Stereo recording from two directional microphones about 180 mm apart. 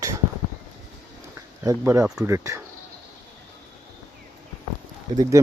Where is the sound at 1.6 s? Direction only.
15° right (ahead or behind).